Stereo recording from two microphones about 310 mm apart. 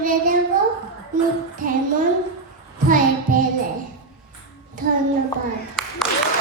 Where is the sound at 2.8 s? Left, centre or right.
Right.